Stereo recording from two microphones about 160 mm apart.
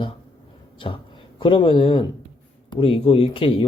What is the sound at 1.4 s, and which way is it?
Speech, 30° left (ahead or behind).